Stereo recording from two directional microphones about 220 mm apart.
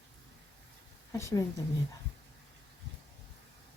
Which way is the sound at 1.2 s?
15° left (ahead or behind).